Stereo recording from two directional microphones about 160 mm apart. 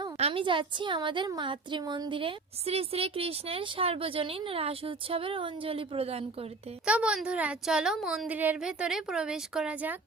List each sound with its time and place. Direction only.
0.2 s a woman's voice: 35° right (ahead or behind)
6.8 s a woman's voice: 5° right (ahead or behind)